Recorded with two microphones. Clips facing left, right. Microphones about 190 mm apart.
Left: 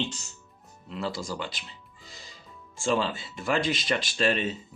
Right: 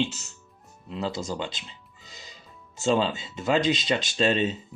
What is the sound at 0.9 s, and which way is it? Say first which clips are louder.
Speech: right 2 dB; 20° right (ahead or behind).